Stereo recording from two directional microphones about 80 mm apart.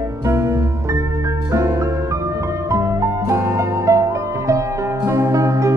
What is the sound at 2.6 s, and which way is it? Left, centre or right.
Music, right.